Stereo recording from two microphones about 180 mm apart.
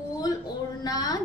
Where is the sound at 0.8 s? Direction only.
20° left (ahead or behind).